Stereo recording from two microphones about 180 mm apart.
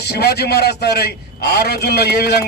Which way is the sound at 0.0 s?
65° left (ahead or behind).